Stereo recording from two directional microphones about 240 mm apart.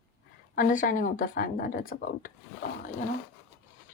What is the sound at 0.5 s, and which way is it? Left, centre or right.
A woman's voice, left.